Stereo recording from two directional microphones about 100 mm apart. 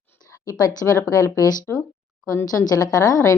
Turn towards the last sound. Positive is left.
turn(degrees=35)  # may be behind; listen again after turning